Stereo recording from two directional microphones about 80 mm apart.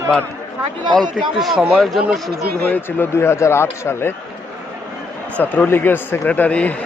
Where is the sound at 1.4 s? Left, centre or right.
Centre.